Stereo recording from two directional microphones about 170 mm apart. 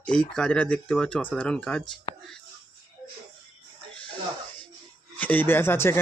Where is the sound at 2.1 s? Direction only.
25° left (ahead or behind).